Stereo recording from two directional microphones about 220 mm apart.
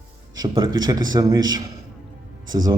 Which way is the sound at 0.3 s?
20° right (ahead or behind).